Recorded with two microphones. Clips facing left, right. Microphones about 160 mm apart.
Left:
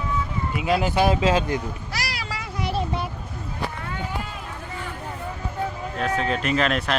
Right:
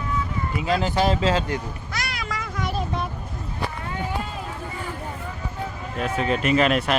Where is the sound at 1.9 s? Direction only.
35° left (ahead or behind).